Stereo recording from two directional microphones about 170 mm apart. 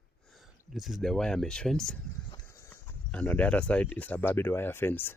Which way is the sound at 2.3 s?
25° left (ahead or behind).